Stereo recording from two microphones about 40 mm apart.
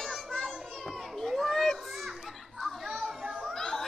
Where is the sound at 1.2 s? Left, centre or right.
Centre.